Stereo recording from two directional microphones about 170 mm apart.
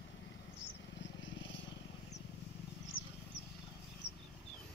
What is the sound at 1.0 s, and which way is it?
Vehicle, 90° left.